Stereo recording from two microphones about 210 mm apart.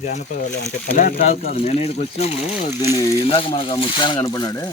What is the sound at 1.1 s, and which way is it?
Speech, 30° left (ahead or behind).